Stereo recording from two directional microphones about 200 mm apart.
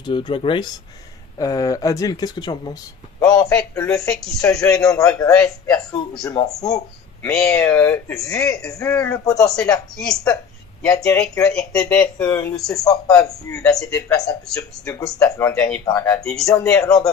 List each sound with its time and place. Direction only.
0.0 s speech: 25° left (ahead or behind)
3.2 s speech: 10° left (ahead or behind)
5.3 s speech: 5° left (ahead or behind)
7.2 s speech: 5° left (ahead or behind)
10.8 s speech: 15° left (ahead or behind)